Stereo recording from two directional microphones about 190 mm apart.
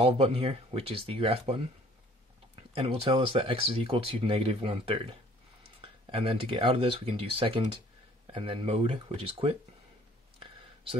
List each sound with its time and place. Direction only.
0.0 s speech: 30° right (ahead or behind)
2.7 s speech: 30° right (ahead or behind)
10.4 s a sound: 30° right (ahead or behind)